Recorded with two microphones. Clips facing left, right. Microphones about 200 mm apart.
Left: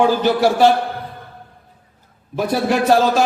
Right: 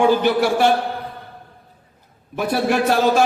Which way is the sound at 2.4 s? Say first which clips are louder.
Left 1 dB; 55° right (ahead or behind).